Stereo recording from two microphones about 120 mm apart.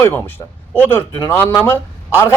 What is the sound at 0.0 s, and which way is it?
A man's voice, 15° left (ahead or behind).